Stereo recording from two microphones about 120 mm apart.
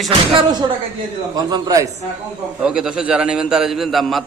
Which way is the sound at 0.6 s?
35° right (ahead or behind).